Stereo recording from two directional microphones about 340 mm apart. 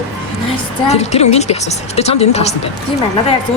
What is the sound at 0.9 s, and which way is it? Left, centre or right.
Speech, centre.